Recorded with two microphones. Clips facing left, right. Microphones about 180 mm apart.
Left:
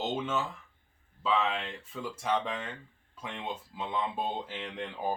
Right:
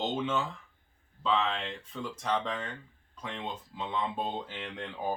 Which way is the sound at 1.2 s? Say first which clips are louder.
Even; 5° left (ahead or behind).